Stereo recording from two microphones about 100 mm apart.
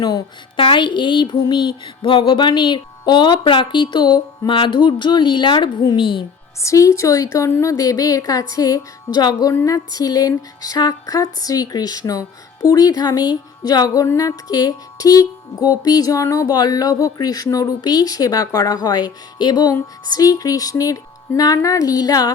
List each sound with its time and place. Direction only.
0.0 s speech: 45° left (ahead or behind)
6.6 s music: 30° left (ahead or behind)